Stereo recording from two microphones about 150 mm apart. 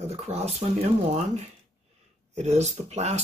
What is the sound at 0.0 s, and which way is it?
Speech, 45° right (ahead or behind).